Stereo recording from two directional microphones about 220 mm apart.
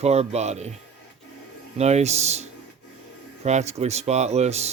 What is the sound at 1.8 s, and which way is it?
Speech, 30° right (ahead or behind).